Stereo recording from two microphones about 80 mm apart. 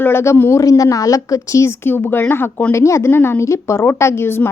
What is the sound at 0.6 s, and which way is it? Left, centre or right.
Speech, left.